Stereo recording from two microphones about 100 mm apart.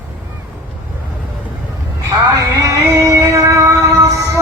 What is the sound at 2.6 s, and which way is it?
Music, 35° right (ahead or behind).